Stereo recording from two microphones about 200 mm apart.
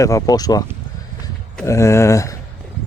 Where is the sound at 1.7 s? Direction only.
15° left (ahead or behind).